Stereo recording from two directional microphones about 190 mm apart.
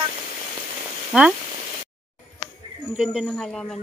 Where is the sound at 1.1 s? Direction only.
5° right (ahead or behind).